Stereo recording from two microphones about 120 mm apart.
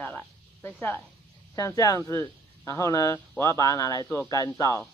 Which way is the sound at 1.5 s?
30° left (ahead or behind).